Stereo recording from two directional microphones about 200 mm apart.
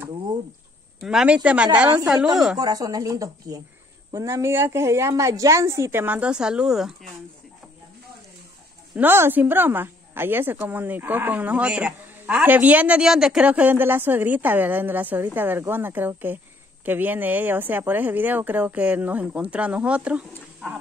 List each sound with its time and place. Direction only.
1.0 s speech: 5° right (ahead or behind)
2.5 s a woman's voice: 20° right (ahead or behind); by 7.1 s centre (ahead or behind)
8.9 s a woman's voice: 10° right (ahead or behind)